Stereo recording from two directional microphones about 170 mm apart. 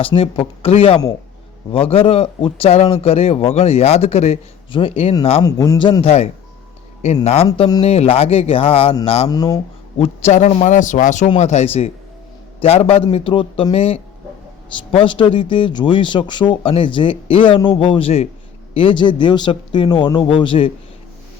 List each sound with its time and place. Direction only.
0.0 s speech: 30° left (ahead or behind)
5.4 s speech: 20° left (ahead or behind)
6.0 s speech: 35° left (ahead or behind)
7.4 s speech: 25° left (ahead or behind)
9.3 s speech: 20° left (ahead or behind)
10.0 s speech: 40° left (ahead or behind)